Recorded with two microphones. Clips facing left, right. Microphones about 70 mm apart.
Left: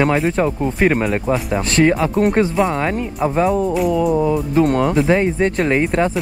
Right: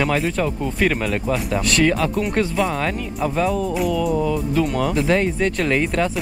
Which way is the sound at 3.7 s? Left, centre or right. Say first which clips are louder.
Left 4 dB; centre.